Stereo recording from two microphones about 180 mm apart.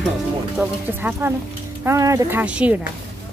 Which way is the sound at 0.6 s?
5° right (ahead or behind).